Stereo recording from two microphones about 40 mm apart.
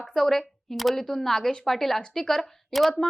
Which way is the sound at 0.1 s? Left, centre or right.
Centre.